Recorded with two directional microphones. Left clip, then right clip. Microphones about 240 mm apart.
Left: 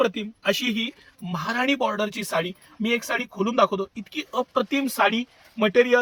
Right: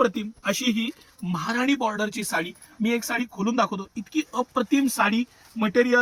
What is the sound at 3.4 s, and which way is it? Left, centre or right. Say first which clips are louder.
Speech: left 5 dB; left.